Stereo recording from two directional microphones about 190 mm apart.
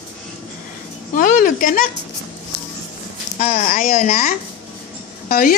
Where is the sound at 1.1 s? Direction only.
45° left (ahead or behind).